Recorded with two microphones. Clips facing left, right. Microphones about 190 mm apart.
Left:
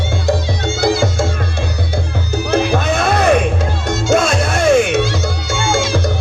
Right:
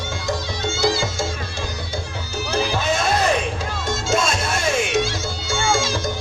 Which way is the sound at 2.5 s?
60° left (ahead or behind).